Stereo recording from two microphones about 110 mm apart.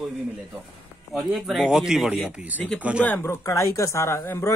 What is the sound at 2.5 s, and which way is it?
Speech, 15° left (ahead or behind).